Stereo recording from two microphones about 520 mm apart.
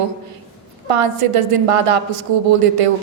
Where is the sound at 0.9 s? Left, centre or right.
Right.